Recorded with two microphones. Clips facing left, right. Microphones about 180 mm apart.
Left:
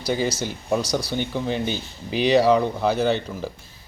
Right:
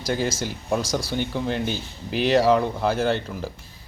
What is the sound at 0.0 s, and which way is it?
Speech, 5° right (ahead or behind).